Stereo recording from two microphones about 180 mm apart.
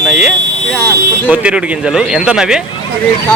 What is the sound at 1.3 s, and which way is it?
Speech, 5° right (ahead or behind).